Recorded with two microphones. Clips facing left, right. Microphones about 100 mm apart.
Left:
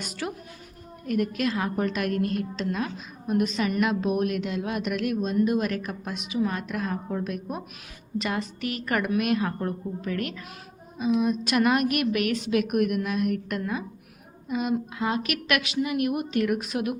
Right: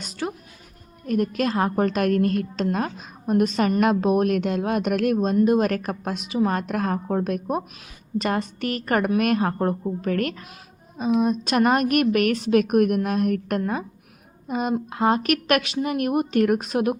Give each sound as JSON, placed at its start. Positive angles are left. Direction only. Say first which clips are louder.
{"t": 0.1, "sound": "music", "louder": "right 5 dB", "side_deg": -30}
{"t": 1.0, "sound": "a woman's voice", "louder": "right 3 dB", "side_deg": -35}
{"t": 10.9, "sound": "a woman's voice", "louder": "right 3 dB", "side_deg": -40}